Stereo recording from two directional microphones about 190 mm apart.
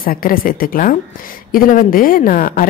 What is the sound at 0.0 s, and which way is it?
A woman's voice, 50° left (ahead or behind).